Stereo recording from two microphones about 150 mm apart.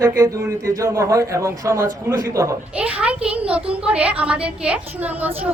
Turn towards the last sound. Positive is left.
turn(degrees=-10)  # may be behind; listen again after turning